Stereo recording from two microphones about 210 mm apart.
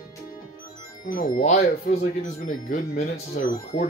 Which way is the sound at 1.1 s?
40° left (ahead or behind).